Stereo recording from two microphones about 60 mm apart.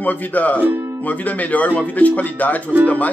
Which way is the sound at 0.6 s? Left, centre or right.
Right.